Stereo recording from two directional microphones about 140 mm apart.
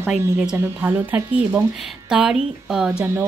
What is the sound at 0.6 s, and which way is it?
A woman's voice, 15° right (ahead or behind).